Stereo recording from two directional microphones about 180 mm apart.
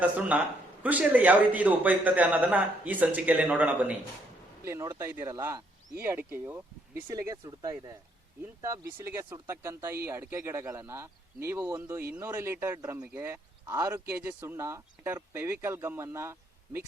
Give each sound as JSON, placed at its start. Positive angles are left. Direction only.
{"t": 0.3, "sound": "a man's voice", "side_deg": -10}